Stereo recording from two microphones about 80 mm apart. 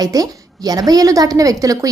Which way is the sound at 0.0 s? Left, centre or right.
Right.